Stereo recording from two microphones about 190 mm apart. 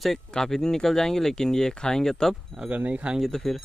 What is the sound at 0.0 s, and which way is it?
Speech, centre (ahead or behind).